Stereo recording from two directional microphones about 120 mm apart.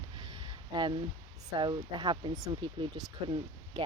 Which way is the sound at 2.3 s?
30° right (ahead or behind).